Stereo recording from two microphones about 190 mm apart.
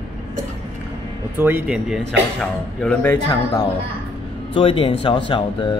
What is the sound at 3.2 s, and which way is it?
Speech, 25° left (ahead or behind).